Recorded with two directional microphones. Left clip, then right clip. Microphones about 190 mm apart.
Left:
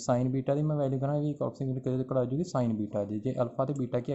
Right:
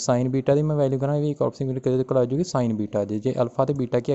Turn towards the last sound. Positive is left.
turn(degrees=-40)  # may be behind; listen again after turning